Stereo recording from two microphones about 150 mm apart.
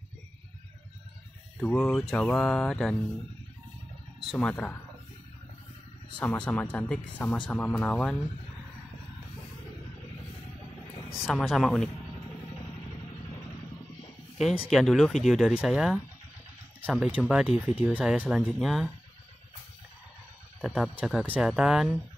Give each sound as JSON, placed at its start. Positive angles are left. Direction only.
{"t": 1.6, "sound": "music", "side_deg": 5}
{"t": 4.2, "sound": "speech", "side_deg": 5}
{"t": 6.1, "sound": "music", "side_deg": 10}
{"t": 11.1, "sound": "speech", "side_deg": 0}
{"t": 14.4, "sound": "speech", "side_deg": -5}
{"t": 17.3, "sound": "speech", "side_deg": -5}
{"t": 20.6, "sound": "speech", "side_deg": 0}